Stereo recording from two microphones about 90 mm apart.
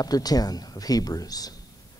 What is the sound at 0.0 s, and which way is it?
A man's voice, 45° left (ahead or behind).